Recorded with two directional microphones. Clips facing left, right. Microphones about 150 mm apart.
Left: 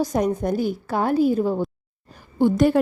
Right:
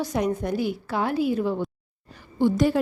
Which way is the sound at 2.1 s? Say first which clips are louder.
Left 3 dB; 50° left (ahead or behind).